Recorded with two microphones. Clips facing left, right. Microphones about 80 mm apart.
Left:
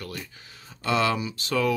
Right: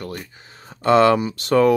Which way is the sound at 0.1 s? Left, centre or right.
Right.